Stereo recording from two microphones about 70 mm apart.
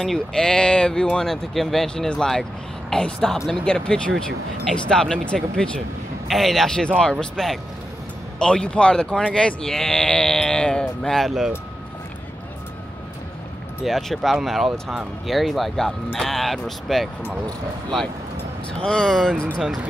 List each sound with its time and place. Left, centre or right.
0.0 s speech: centre
1.3 s speech: centre
6.2 s speech: centre
13.8 s speech: centre
18.7 s speech: centre